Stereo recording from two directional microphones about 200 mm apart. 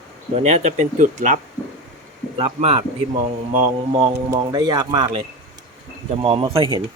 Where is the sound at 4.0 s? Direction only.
20° right (ahead or behind).